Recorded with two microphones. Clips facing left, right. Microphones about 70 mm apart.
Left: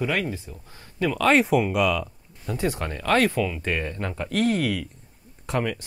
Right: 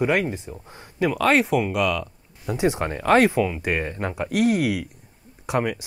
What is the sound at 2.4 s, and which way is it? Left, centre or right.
Speech, centre.